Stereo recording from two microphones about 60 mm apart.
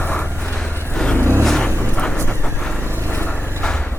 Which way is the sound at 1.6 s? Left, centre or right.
Left.